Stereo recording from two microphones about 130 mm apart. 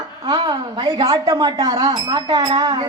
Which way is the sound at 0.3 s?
35° right (ahead or behind).